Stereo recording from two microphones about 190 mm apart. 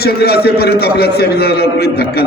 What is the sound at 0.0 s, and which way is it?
A man's voice, 55° left (ahead or behind).